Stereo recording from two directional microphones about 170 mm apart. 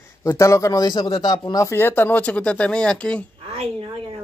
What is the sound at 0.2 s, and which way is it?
A man's voice, 20° left (ahead or behind).